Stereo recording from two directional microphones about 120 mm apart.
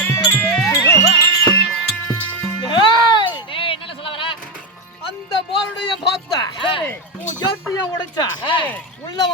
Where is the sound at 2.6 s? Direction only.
40° left (ahead or behind).